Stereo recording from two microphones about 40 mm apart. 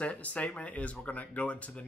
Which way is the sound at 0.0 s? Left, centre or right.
Left.